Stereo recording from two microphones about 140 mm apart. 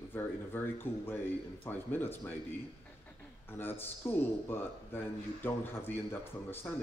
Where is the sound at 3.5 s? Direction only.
15° left (ahead or behind).